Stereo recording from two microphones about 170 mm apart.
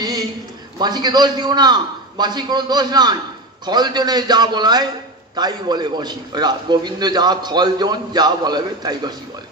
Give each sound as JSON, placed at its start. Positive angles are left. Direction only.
{"t": 0.7, "sound": "a man's voice", "side_deg": -25}